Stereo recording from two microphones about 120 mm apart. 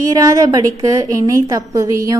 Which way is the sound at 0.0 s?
30° right (ahead or behind).